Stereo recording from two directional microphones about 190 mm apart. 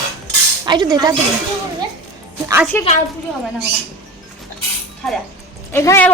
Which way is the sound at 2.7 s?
10° left (ahead or behind).